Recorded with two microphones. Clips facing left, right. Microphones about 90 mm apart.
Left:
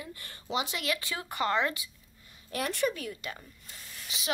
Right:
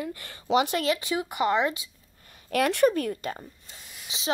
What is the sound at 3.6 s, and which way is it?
Snake, 25° right (ahead or behind).